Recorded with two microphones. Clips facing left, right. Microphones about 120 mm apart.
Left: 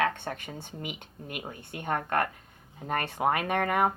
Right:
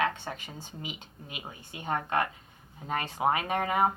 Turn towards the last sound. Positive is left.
turn(degrees=60)  # may be behind; listen again after turning